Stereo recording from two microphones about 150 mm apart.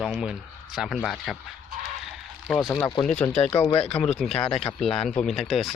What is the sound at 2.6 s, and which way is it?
Speech, 20° left (ahead or behind).